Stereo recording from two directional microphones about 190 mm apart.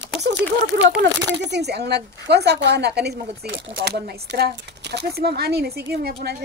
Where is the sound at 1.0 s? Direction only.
65° right (ahead or behind).